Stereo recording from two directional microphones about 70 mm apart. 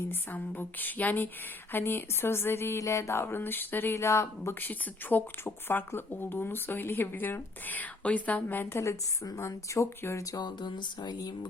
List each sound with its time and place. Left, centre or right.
0.1 s speech: left
3.9 s speech: left
4.6 s speech: left
8.7 s a woman's voice: left
10.3 s speech: left